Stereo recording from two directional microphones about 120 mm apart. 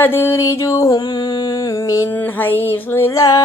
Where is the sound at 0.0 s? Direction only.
15° left (ahead or behind).